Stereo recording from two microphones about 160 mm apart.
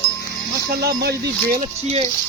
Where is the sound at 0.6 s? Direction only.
80° right.